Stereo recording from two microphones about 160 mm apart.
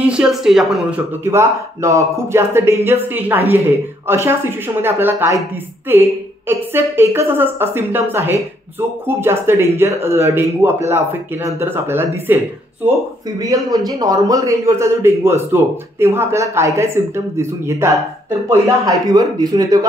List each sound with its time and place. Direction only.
0.0 s a man's voice: 5° right (ahead or behind)
13.4 s a man's voice: 20° right (ahead or behind)